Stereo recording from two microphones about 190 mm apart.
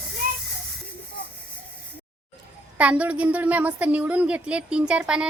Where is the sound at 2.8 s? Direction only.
5° right (ahead or behind).